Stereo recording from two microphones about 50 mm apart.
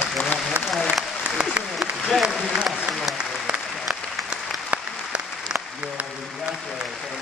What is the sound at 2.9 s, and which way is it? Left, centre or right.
Applause, centre.